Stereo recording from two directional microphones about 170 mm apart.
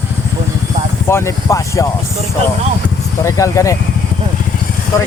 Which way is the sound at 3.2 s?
20° left (ahead or behind).